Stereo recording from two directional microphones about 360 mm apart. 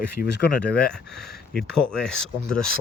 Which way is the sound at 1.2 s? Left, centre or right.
Centre.